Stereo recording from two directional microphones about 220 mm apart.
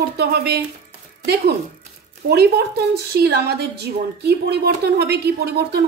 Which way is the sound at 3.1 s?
45° right (ahead or behind).